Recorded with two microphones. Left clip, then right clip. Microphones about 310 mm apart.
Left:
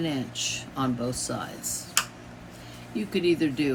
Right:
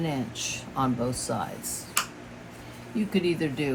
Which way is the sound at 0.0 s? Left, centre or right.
Centre.